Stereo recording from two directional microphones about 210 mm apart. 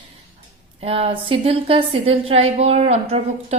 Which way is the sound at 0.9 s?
25° right (ahead or behind).